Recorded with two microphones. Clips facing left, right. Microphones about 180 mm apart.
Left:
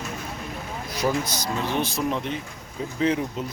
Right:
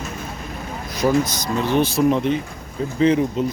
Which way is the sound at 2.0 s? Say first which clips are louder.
Right 11 dB; 55° right (ahead or behind).